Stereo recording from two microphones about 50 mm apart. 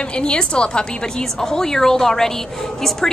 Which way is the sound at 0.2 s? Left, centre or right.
Centre.